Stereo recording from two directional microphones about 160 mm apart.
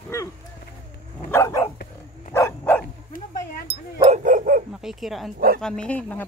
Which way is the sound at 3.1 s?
65° left (ahead or behind).